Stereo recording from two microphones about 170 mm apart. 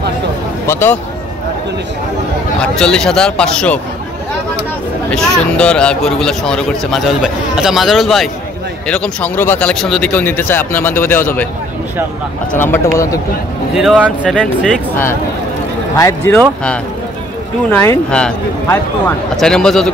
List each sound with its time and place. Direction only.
0.7 s speech: 15° left (ahead or behind)
2.6 s speech: 5° left (ahead or behind)
5.1 s speech: 5° left (ahead or behind)
12.5 s speech: 15° left (ahead or behind)
13.7 s speech: centre (ahead or behind)
16.0 s speech: 15° left (ahead or behind)